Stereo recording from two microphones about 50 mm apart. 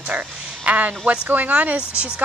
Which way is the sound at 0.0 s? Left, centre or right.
Right.